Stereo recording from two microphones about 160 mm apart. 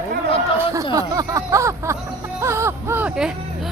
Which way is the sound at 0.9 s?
20° right (ahead or behind).